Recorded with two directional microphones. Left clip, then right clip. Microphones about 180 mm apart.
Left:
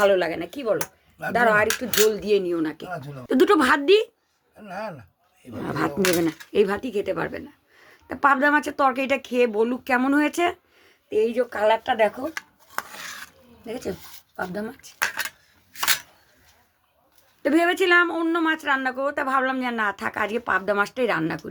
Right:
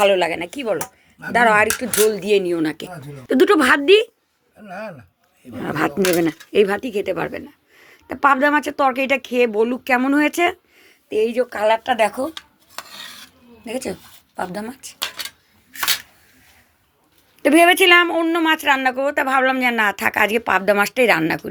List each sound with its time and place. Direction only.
0.0 s a woman's voice: centre (ahead or behind); by 2.9 s 25° right (ahead or behind)
3.2 s speech: 5° right (ahead or behind)
5.6 s a woman's voice: 25° right (ahead or behind)
11.1 s speech: 35° right (ahead or behind); by 12.3 s 15° right (ahead or behind)
13.7 s speech: 10° right (ahead or behind)
17.4 s speech: 15° right (ahead or behind)